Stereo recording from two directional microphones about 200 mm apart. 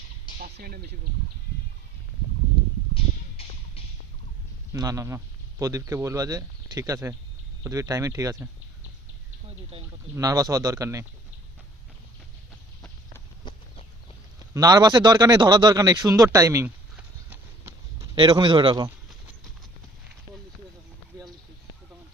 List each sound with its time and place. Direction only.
0.3 s speech: 50° right (ahead or behind)
4.7 s a man's voice: 15° right (ahead or behind)
9.7 s speech: 25° right (ahead or behind)
13.5 s a sound: 25° left (ahead or behind)
14.5 s speech: 20° right (ahead or behind)
18.1 s speech: 20° right (ahead or behind)